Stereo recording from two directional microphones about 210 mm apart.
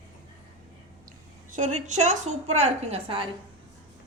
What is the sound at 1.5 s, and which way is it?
Speech, 35° right (ahead or behind).